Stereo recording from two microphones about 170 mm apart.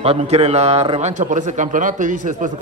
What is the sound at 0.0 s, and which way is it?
A man's voice, 35° right (ahead or behind).